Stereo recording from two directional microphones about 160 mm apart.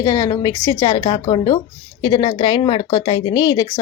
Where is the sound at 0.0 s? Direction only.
25° left (ahead or behind).